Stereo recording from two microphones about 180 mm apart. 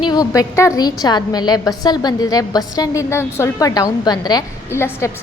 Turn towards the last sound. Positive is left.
turn(degrees=15)  # may be behind; listen again after turning